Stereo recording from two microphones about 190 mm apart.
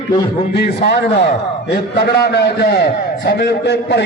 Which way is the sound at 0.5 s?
60° left (ahead or behind).